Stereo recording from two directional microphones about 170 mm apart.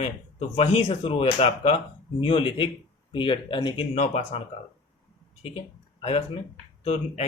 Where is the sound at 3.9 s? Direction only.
40° left (ahead or behind).